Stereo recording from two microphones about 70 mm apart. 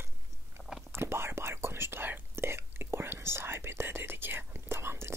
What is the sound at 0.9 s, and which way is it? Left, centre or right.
Whispering, right.